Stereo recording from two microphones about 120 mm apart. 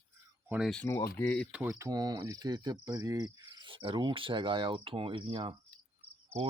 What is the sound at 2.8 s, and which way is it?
Cricket, 30° right (ahead or behind).